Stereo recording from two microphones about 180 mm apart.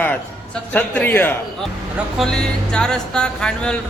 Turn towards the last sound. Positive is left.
turn(degrees=5)  # may be behind; listen again after turning